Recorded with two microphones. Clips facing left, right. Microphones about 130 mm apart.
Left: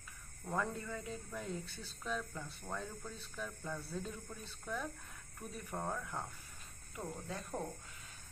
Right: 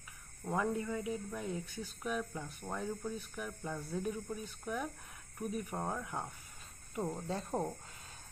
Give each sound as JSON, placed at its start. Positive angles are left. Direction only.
{"t": 0.4, "sound": "speech", "side_deg": -10}
{"t": 6.9, "sound": "speech", "side_deg": -30}